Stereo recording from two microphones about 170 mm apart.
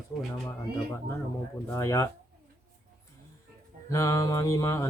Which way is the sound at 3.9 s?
15° left (ahead or behind).